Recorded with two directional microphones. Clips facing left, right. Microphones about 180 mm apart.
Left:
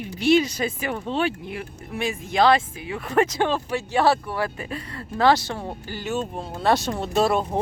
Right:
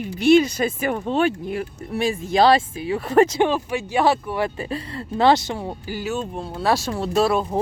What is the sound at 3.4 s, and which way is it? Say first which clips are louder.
Speech: right 3 dB; 15° right (ahead or behind).